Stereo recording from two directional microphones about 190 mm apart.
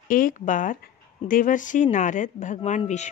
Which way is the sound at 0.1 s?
45° left (ahead or behind).